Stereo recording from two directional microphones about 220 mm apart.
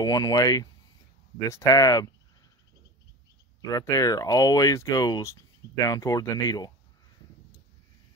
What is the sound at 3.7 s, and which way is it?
Speech, 15° left (ahead or behind).